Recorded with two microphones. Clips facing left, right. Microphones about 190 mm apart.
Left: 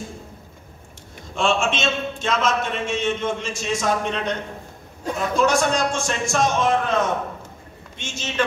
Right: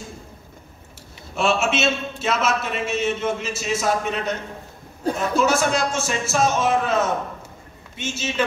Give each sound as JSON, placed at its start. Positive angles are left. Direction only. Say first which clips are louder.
{"t": 1.3, "sound": "a man's voice", "louder": "right 1 dB", "side_deg": -5}